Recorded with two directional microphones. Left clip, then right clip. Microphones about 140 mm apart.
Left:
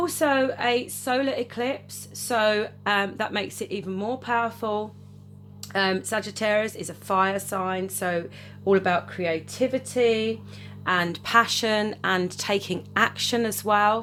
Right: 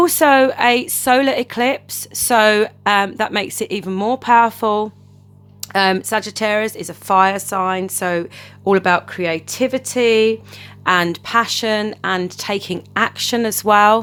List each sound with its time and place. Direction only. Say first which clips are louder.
0.0 s speech: right 11 dB; 70° right (ahead or behind)
2.8 s speech: right 9 dB; 40° right (ahead or behind); by 4.9 s 70° right (ahead or behind)
5.5 s speech: right 9 dB; 45° right (ahead or behind)
10.8 s speech: right 9 dB; 45° right (ahead or behind)
11.2 s speech: right 4 dB; 20° right (ahead or behind)
13.7 s speech: right 10 dB; 50° right (ahead or behind)